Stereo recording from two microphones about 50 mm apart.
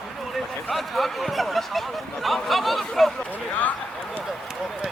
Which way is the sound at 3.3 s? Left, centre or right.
Left.